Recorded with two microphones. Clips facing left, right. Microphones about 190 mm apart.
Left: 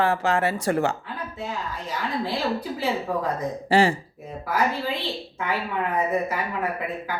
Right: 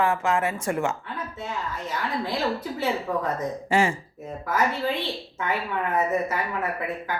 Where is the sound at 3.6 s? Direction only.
35° left (ahead or behind).